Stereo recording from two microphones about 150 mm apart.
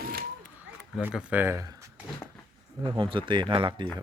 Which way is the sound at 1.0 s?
10° right (ahead or behind).